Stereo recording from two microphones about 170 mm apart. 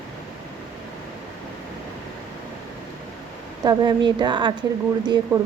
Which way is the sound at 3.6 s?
25° right (ahead or behind).